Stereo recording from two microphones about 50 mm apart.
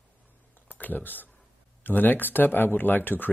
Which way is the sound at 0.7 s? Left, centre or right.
Left.